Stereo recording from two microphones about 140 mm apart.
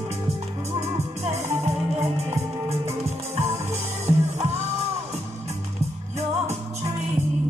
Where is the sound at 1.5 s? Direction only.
20° right (ahead or behind).